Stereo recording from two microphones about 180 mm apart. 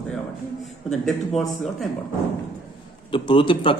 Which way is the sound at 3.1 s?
25° left (ahead or behind).